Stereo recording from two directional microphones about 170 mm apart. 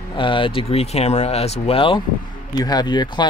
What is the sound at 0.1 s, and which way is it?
Speech, 30° left (ahead or behind).